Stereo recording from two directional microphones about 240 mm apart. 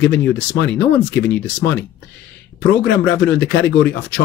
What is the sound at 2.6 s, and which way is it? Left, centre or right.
Speech, left.